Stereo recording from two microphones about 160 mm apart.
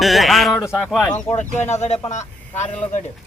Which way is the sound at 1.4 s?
45° left (ahead or behind).